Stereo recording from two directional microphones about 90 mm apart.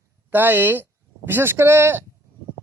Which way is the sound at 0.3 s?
20° right (ahead or behind).